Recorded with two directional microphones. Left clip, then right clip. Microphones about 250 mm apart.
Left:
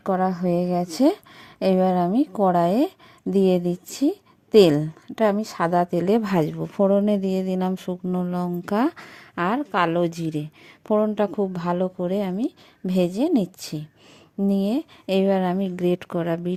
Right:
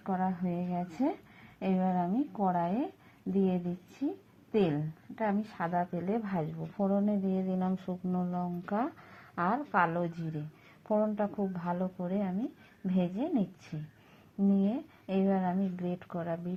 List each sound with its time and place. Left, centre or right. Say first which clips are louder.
0.0 s a woman's voice: left 11 dB; left
7.3 s a woman's voice: left 9 dB; left